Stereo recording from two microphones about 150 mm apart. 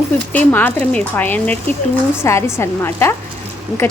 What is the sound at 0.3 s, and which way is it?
Speech, 15° left (ahead or behind).